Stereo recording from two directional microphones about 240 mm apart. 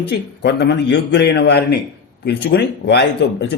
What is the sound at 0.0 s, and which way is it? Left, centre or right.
Speech, left.